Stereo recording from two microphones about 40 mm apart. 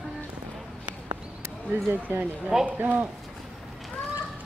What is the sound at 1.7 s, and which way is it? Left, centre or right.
Speech, right.